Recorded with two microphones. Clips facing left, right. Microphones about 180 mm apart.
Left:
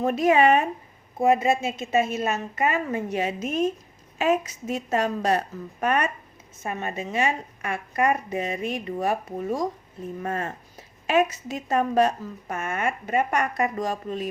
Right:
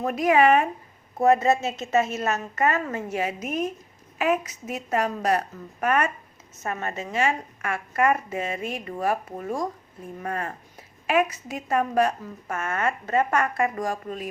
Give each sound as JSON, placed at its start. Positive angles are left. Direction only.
{"t": 0.0, "sound": "a woman's voice", "side_deg": 25}